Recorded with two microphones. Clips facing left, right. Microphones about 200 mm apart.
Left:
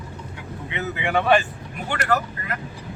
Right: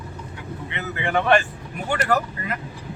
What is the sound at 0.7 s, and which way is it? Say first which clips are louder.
Speech: left 1 dB; 15° left (ahead or behind).